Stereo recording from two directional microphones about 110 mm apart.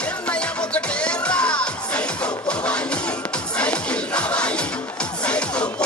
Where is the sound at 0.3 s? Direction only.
10° left (ahead or behind).